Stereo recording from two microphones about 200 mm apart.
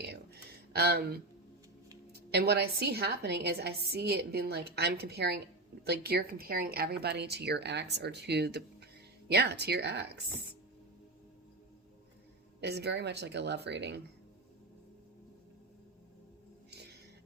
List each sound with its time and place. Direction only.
0.0 s a sound: 55° right (ahead or behind)
2.3 s a woman's voice: 55° right (ahead or behind)
12.5 s speech: 55° right (ahead or behind)